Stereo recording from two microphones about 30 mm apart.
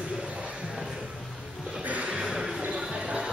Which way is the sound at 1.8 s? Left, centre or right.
Right.